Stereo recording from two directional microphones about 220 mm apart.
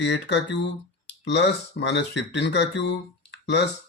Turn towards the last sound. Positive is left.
turn(degrees=50)  # may be behind; listen again after turning